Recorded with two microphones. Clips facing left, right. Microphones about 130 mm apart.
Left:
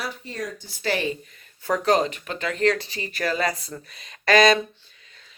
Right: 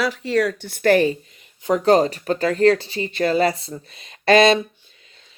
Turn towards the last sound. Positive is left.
turn(degrees=-30)  # may be behind; listen again after turning